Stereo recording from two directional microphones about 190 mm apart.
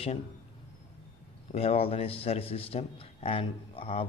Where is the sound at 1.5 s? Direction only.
30° left (ahead or behind).